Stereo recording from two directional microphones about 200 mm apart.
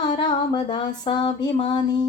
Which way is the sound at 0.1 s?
20° left (ahead or behind).